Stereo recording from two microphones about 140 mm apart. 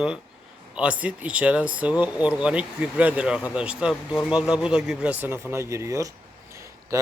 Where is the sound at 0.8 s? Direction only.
10° right (ahead or behind).